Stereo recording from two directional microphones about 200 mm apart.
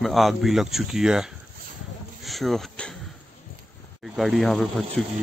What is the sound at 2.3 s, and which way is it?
Speech, centre (ahead or behind).